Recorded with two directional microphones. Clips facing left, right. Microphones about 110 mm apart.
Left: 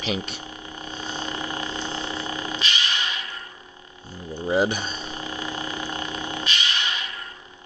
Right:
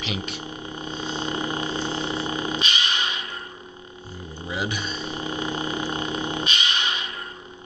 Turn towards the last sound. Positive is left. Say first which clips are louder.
# right 1 dB
turn(degrees=-20)  # may be behind; listen again after turning